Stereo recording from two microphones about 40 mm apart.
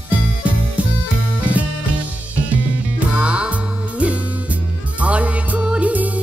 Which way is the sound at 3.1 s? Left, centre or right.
Right.